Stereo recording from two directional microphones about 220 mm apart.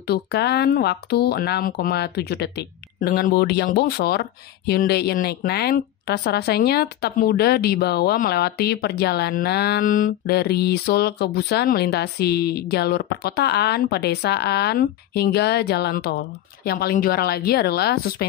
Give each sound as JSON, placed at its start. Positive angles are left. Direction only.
{"t": 0.0, "sound": "speech", "side_deg": 50}